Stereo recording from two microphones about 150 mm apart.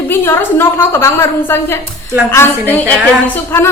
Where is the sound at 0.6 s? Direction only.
15° left (ahead or behind).